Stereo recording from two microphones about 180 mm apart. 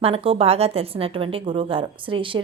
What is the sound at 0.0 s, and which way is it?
A woman's voice, 30° right (ahead or behind).